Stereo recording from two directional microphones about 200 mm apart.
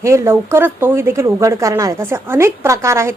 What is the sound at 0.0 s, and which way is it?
A woman's voice, 15° right (ahead or behind).